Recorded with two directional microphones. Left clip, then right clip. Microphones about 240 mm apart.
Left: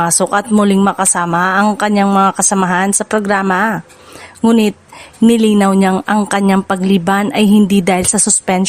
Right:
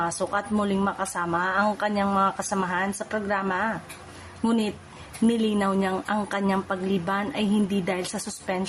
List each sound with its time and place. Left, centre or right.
0.0 s speech: left